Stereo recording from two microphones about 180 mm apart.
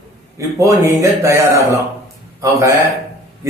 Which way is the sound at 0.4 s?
15° right (ahead or behind).